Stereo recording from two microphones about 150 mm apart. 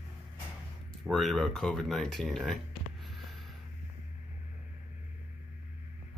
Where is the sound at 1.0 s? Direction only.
Centre (ahead or behind).